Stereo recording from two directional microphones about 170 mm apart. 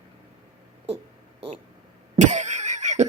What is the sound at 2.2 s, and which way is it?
Cough, 45° right (ahead or behind).